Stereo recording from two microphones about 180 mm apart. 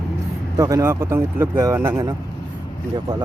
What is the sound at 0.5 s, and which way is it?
Speech, 20° right (ahead or behind).